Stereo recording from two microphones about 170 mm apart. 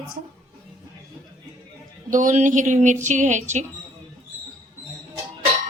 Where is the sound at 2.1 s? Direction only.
50° right (ahead or behind).